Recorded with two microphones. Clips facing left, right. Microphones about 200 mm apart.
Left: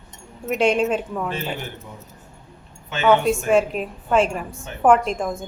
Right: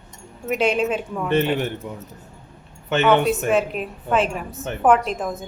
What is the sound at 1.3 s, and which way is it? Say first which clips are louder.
Speech: right 8 dB; 65° right (ahead or behind).